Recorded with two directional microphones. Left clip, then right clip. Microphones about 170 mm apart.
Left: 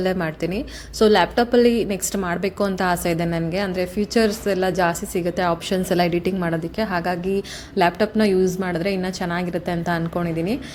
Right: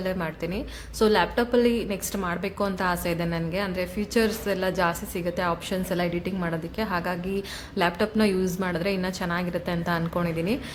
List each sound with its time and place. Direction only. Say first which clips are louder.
0.0 s a woman's voice: left 6 dB; 30° left (ahead or behind); by 10.6 s 10° left (ahead or behind)